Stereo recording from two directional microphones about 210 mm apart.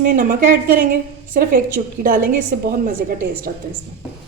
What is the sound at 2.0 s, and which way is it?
A woman's voice, 40° right (ahead or behind).